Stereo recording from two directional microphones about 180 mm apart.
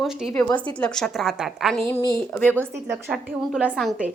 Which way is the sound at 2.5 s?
5° right (ahead or behind).